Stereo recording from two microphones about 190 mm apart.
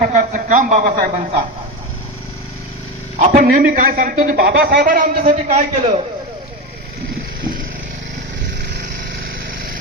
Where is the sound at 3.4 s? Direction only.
45° right (ahead or behind).